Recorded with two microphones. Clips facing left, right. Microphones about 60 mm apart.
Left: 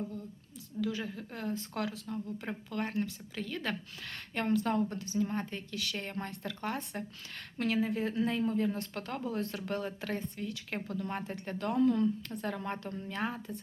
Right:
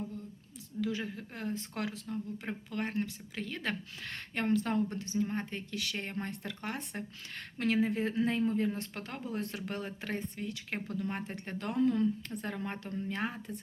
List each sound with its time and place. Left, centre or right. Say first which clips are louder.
0.8 s speech: even; right